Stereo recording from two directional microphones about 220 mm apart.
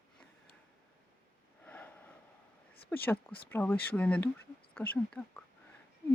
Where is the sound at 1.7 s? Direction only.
5° left (ahead or behind).